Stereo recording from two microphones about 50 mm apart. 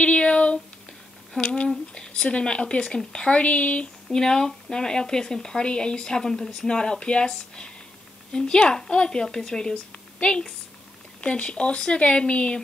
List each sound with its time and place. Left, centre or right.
0.0 s speech: left
4.1 s speech: centre